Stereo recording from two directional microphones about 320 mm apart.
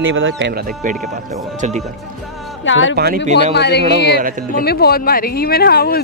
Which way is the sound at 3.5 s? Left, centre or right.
Left.